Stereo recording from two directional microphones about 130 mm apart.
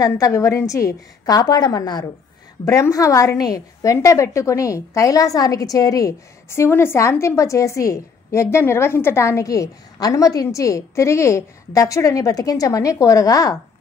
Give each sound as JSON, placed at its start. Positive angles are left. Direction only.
{"t": 0.0, "sound": "a woman's voice", "side_deg": 25}